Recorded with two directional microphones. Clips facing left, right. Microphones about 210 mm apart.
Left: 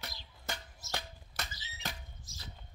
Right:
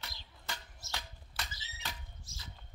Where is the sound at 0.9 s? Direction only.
45° left (ahead or behind).